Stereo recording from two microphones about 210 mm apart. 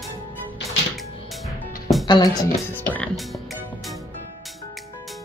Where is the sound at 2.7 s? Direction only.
5° left (ahead or behind).